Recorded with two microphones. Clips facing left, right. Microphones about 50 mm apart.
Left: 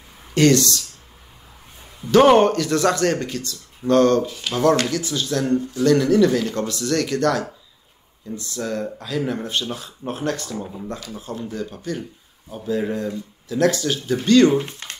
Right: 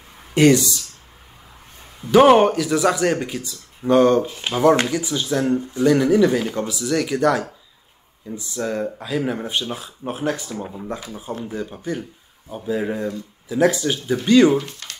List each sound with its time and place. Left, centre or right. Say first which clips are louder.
0.3 s speech: right 1 dB; centre
2.0 s speech: right 1 dB; centre
4.3 s speech: right 1 dB; right
4.6 s speech: right 2 dB; centre
14.6 s a sound: left 3 dB; left